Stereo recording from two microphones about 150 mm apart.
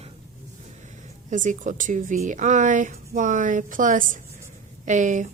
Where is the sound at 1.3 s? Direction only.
55° right (ahead or behind).